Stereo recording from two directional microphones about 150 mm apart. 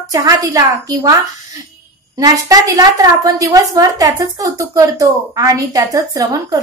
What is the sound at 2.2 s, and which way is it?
A woman's voice, 20° right (ahead or behind).